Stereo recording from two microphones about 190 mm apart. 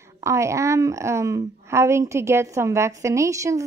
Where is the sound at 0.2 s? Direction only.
15° right (ahead or behind).